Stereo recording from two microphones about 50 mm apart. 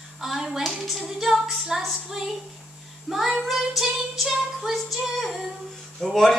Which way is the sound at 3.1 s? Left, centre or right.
Centre.